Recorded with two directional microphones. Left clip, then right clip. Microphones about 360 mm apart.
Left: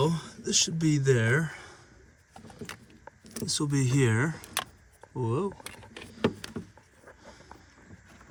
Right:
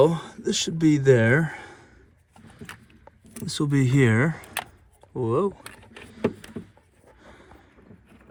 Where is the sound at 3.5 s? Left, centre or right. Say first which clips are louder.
Right 5 dB; centre.